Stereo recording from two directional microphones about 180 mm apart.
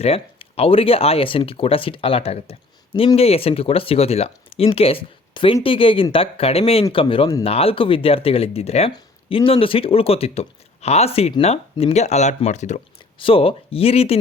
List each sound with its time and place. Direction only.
0.0 s speech: 35° left (ahead or behind)